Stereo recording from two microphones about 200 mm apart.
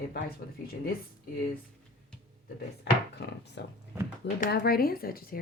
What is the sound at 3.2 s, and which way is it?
Speech, 55° left (ahead or behind).